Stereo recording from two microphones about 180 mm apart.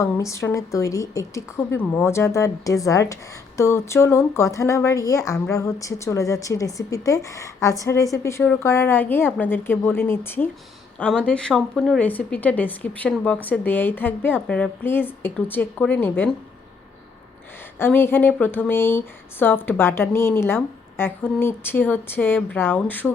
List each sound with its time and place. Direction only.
0.0 s speech: 15° left (ahead or behind)
17.7 s speech: 10° left (ahead or behind)